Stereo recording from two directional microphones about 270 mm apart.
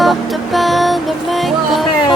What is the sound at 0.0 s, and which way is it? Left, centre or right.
Music, centre.